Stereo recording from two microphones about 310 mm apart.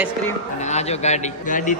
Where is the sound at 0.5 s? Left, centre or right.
Left.